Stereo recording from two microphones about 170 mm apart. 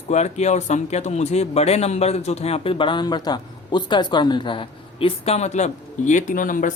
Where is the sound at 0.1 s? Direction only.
40° left (ahead or behind).